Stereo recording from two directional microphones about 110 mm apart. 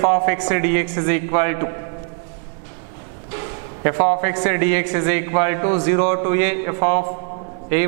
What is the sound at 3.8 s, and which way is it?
A man's voice, 10° right (ahead or behind).